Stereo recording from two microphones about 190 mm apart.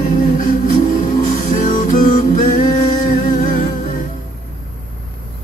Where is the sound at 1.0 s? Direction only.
40° left (ahead or behind).